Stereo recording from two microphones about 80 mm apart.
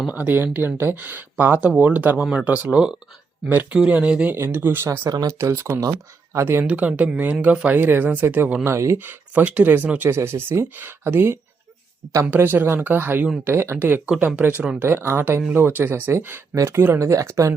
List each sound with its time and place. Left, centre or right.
0.1 s speech: right
3.5 s speech: right
4.4 s speech: right
4.9 s speech: right
5.3 s speech: right
6.7 s speech: centre; by 9.0 s right
9.0 s speech: right
10.1 s speech: right
14.8 s speech: right